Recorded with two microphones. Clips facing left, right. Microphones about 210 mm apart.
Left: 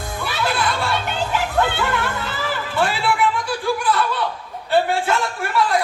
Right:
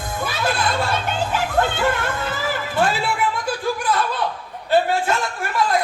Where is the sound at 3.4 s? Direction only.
40° right (ahead or behind).